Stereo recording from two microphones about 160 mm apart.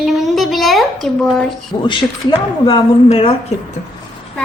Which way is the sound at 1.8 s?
30° left (ahead or behind).